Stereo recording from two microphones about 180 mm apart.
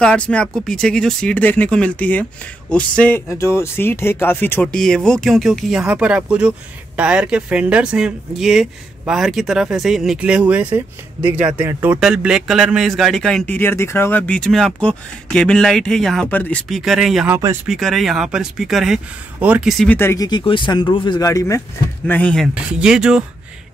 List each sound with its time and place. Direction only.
0.0 s speech: 5° left (ahead or behind)
17.3 s speech: 15° right (ahead or behind)
17.6 s speech: centre (ahead or behind)
19.8 s speech: 10° left (ahead or behind)
22.5 s speech: 5° right (ahead or behind)